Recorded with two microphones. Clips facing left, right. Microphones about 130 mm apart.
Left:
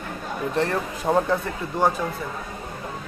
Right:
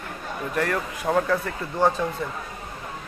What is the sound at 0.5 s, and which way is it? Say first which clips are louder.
Speech: left 1 dB; 25° left (ahead or behind).